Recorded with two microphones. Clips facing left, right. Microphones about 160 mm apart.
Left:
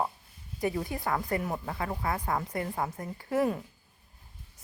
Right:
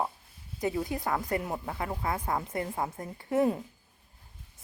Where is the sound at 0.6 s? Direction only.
20° right (ahead or behind).